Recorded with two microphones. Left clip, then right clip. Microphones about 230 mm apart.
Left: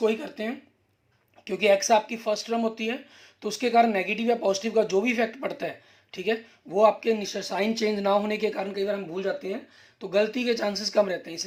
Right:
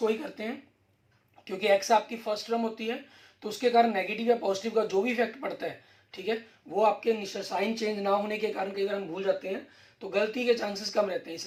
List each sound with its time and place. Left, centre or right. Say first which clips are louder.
0.0 s speech: left 3 dB; left
10.1 s speech: left 2 dB; left